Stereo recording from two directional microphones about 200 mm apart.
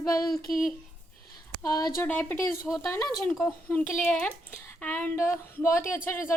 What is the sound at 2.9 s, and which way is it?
A woman's voice, 15° left (ahead or behind).